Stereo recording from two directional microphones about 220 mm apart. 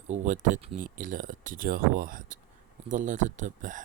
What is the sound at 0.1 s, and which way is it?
Speech, 35° right (ahead or behind).